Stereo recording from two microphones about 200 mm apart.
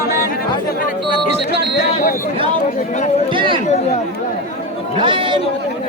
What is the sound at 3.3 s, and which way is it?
Chatter, 25° right (ahead or behind).